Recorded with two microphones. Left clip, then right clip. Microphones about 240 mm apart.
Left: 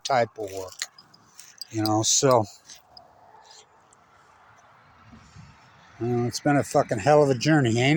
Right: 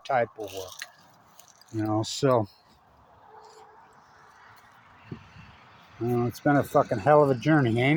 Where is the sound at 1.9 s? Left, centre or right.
Left.